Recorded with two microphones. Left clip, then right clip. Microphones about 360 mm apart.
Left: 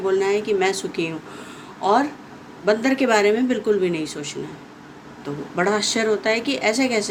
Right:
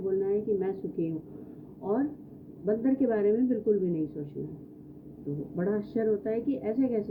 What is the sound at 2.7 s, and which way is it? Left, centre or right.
Speech, centre.